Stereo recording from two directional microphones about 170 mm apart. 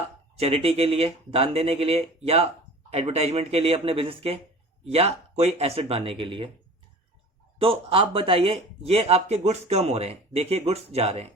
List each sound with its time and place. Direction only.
0.3 s speech: 35° right (ahead or behind)
7.6 s speech: 35° right (ahead or behind)